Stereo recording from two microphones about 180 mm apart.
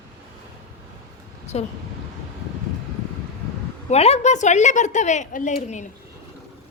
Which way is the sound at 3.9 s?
35° left (ahead or behind).